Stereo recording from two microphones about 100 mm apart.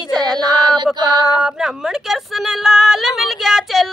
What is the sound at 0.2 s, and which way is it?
Speech, 40° right (ahead or behind).